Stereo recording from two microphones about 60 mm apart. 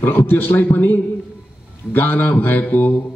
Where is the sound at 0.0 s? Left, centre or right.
Left.